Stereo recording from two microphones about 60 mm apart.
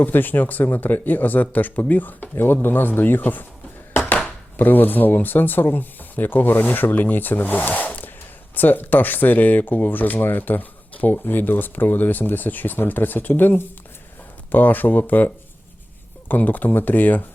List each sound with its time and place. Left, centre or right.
0.0 s speech: left
4.5 s speech: left
16.3 s speech: left